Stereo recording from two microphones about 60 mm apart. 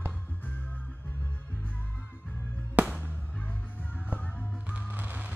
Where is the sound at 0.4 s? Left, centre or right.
Left.